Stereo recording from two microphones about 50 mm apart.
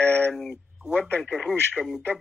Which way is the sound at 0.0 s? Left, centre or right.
Left.